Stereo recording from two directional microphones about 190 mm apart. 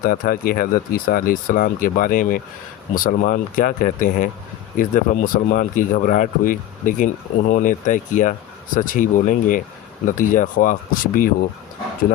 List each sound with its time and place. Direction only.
0.0 s speech: 50° left (ahead or behind)